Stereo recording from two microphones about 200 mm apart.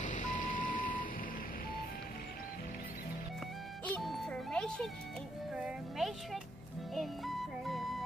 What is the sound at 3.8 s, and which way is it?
Music, 5° left (ahead or behind).